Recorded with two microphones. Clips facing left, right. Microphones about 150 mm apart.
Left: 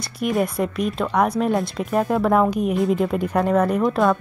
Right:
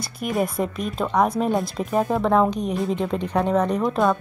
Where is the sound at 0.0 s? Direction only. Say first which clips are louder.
Left 2 dB; centre (ahead or behind).